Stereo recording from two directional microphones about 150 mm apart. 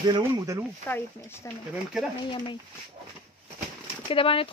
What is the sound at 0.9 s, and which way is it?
Speech, 15° left (ahead or behind).